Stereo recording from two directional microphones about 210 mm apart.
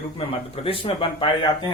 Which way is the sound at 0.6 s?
25° left (ahead or behind).